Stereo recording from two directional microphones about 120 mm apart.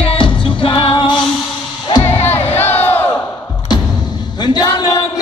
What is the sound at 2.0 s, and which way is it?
Crowd, 20° left (ahead or behind).